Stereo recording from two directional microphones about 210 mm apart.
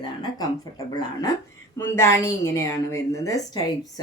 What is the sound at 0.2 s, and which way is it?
A woman's voice, 20° left (ahead or behind).